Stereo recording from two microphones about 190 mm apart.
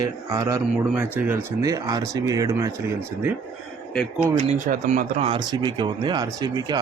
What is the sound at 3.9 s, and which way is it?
Speech, 5° left (ahead or behind).